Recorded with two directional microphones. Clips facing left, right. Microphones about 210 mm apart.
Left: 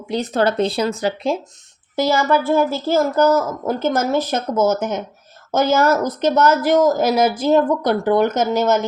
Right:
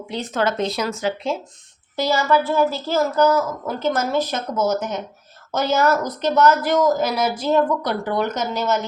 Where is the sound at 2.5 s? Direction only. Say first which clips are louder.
Left 3 dB; 50° left (ahead or behind).